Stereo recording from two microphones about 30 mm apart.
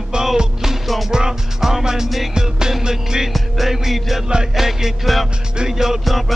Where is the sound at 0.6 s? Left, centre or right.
Centre.